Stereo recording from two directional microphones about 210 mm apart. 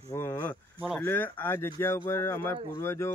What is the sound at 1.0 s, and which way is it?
Speech, 10° left (ahead or behind).